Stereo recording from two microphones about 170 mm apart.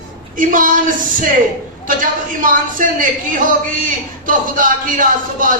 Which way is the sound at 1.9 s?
50° right (ahead or behind).